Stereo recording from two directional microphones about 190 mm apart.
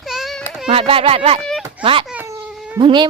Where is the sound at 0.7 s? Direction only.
30° right (ahead or behind).